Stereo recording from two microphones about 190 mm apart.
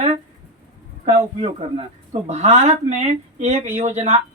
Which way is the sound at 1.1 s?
35° right (ahead or behind).